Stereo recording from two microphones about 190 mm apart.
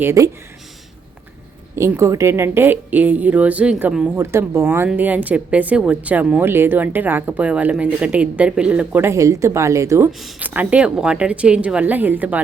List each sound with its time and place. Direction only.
0.0 s a woman's voice: 15° right (ahead or behind)
1.7 s a woman's voice: 15° right (ahead or behind)
10.1 s a woman's voice: centre (ahead or behind)